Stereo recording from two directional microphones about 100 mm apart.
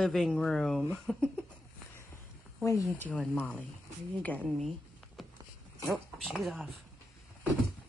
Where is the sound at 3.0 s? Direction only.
15° left (ahead or behind).